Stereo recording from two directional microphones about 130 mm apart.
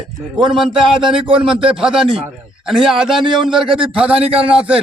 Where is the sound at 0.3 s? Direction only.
5° right (ahead or behind).